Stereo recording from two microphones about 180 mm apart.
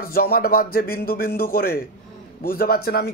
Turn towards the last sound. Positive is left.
turn(degrees=60)  # may be behind; listen again after turning